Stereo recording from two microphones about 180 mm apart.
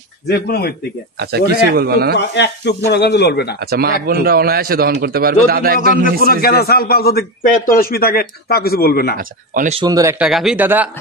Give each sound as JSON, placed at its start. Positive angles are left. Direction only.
{"t": 0.3, "sound": "a man's voice", "side_deg": 60}
{"t": 1.2, "sound": "a man's voice", "side_deg": -60}
{"t": 2.1, "sound": "speech", "side_deg": 75}
{"t": 3.5, "sound": "a man's voice", "side_deg": -60}
{"t": 5.8, "sound": "a man's voice", "side_deg": 45}
{"t": 6.2, "sound": "a man's voice", "side_deg": 60}
{"t": 9.1, "sound": "speech", "side_deg": -50}
{"t": 9.8, "sound": "speech", "side_deg": -20}
{"t": 10.1, "sound": "a man's voice", "side_deg": -5}